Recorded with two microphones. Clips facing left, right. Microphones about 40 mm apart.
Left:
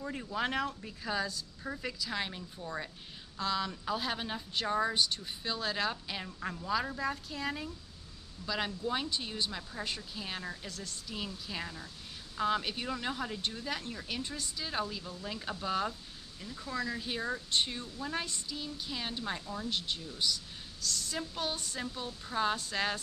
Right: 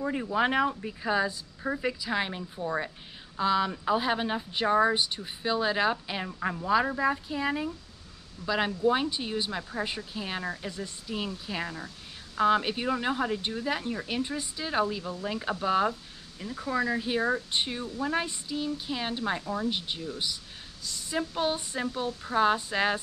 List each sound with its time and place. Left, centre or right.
0.0 s speech: right
19.4 s speech: right
19.7 s speech: centre